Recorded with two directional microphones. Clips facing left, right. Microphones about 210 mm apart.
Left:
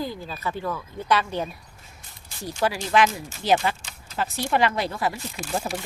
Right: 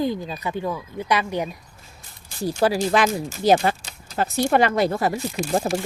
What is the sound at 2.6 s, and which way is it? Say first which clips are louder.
Speech: right 2 dB; 35° right (ahead or behind).